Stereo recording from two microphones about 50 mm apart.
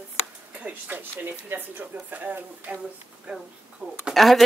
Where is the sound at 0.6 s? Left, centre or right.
Right.